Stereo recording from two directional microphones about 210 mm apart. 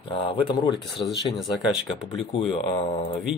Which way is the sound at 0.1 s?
25° left (ahead or behind).